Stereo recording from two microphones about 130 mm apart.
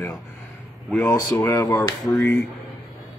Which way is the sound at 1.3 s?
25° left (ahead or behind).